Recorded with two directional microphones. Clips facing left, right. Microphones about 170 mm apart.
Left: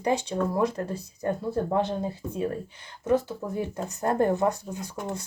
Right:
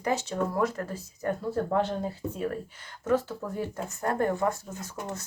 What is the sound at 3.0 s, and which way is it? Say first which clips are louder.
A woman's voice: left 2 dB; 15° left (ahead or behind).